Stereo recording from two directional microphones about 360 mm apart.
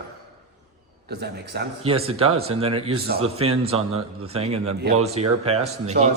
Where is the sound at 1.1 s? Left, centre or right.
Right.